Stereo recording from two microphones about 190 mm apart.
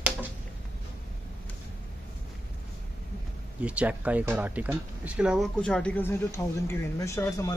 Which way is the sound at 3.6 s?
5° right (ahead or behind).